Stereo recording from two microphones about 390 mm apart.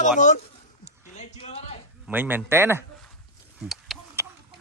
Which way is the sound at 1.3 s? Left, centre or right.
Centre.